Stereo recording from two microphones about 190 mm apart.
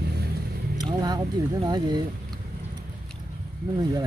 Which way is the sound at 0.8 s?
20° right (ahead or behind).